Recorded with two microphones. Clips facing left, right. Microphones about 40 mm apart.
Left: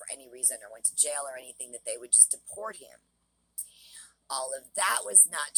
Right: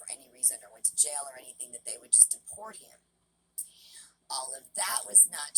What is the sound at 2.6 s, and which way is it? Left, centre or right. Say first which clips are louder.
Speech: left 7 dB; left.